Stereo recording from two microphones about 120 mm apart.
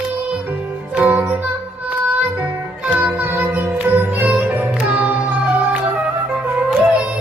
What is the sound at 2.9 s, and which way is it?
Music, 15° right (ahead or behind).